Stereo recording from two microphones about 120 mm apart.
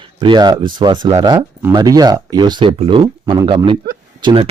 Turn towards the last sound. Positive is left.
turn(degrees=-50)  # may be behind; listen again after turning